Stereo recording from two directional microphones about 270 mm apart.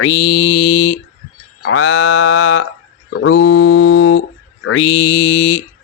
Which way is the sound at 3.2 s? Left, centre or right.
Left.